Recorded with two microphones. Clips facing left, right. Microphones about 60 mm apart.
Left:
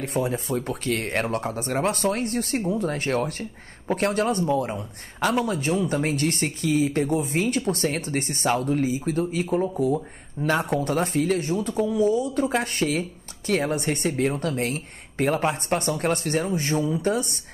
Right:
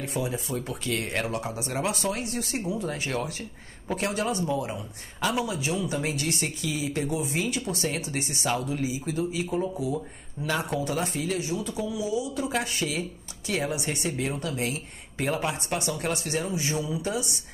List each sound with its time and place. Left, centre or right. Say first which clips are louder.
0.0 s speech: left 5 dB; left